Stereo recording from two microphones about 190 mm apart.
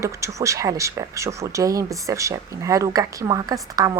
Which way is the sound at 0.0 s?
15° right (ahead or behind).